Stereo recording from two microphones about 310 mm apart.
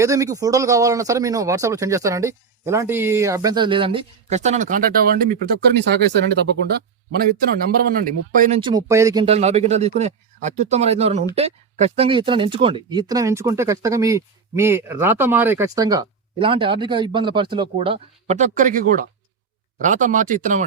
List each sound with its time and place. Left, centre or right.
0.0 s speech: centre